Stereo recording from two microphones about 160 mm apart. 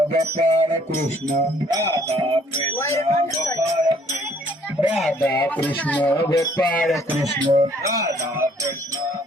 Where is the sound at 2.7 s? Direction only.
20° left (ahead or behind).